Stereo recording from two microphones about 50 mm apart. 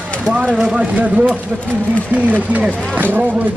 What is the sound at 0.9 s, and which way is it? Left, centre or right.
A man's voice, right.